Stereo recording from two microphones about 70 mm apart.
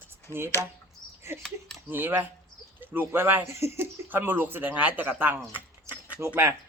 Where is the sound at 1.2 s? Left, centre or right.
Right.